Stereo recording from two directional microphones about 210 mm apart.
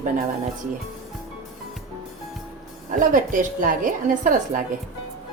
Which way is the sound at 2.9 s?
40° right (ahead or behind).